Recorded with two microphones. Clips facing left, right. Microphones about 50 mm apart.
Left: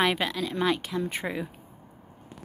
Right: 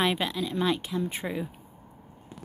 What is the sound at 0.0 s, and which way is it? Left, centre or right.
Speech, left.